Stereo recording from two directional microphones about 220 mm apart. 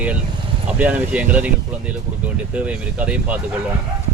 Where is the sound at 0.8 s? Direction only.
5° right (ahead or behind).